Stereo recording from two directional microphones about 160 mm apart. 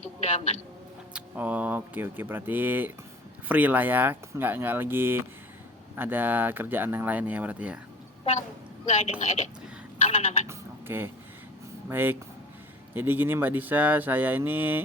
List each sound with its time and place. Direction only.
0.0 s a woman's voice: 40° left (ahead or behind)
1.1 s speech: 10° right (ahead or behind)
8.2 s a woman's voice: 40° left (ahead or behind)
10.4 s bleat: 15° right (ahead or behind)
11.9 s speech: 15° right (ahead or behind)